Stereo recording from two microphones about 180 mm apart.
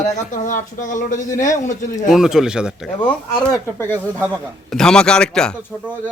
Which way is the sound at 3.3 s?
5° left (ahead or behind).